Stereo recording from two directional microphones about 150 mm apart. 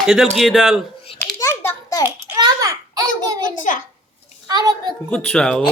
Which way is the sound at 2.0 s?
25° right (ahead or behind).